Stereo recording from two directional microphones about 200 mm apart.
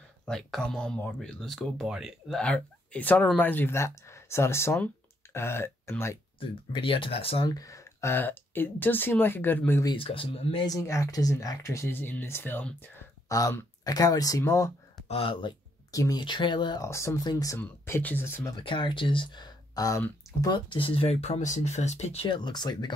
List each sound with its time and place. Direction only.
0.2 s speech: centre (ahead or behind)
6.4 s speech: 25° left (ahead or behind)
9.9 s speech: 30° left (ahead or behind)
15.0 s speech: 25° left (ahead or behind); by 18.5 s 10° left (ahead or behind)
18.6 s speech: 25° left (ahead or behind)